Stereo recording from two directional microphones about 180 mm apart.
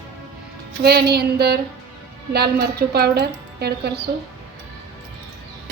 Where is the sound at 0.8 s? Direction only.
65° right (ahead or behind).